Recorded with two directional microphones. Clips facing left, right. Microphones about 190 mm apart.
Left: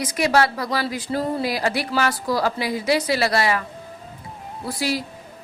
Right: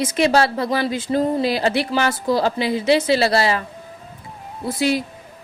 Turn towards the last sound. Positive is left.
turn(degrees=-20)  # may be behind; listen again after turning